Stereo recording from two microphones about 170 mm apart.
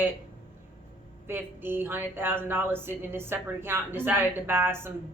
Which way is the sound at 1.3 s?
15° right (ahead or behind).